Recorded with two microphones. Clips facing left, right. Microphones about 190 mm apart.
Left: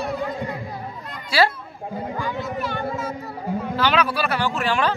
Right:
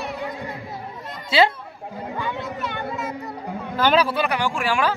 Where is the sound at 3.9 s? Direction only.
25° right (ahead or behind).